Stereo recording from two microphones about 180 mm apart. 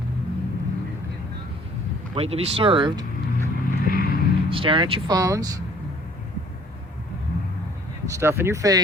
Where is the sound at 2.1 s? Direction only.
30° right (ahead or behind).